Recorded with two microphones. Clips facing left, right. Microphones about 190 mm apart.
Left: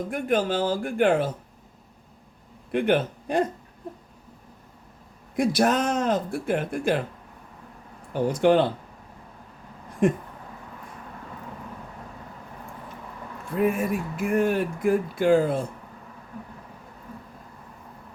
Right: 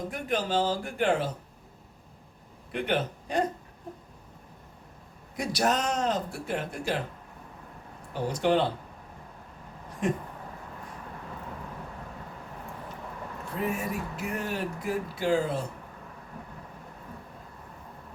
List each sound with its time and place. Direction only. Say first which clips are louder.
0.1 s speech: left 5 dB; 55° left (ahead or behind)
2.7 s speech: left 6 dB; 55° left (ahead or behind)
5.4 s speech: left 6 dB; 55° left (ahead or behind)
8.3 s speech: left 6 dB; 55° left (ahead or behind)
13.6 s speech: left 8 dB; 55° left (ahead or behind)